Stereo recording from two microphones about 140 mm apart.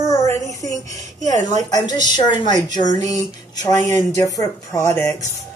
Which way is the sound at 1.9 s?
30° left (ahead or behind).